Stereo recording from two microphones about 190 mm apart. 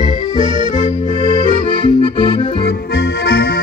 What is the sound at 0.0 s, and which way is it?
Accordion, 25° left (ahead or behind).